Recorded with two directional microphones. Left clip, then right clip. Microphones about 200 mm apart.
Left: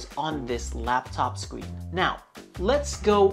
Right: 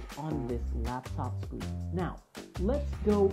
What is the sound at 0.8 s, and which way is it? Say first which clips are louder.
Speech: left 15 dB; 20° left (ahead or behind).